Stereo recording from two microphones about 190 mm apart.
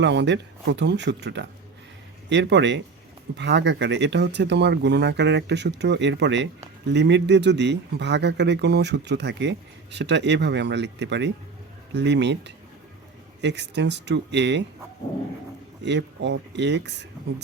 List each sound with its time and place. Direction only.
0.0 s speech: 65° right (ahead or behind)
15.8 s speech: 65° right (ahead or behind)